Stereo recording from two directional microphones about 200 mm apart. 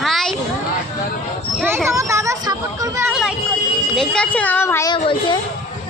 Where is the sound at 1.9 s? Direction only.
15° right (ahead or behind).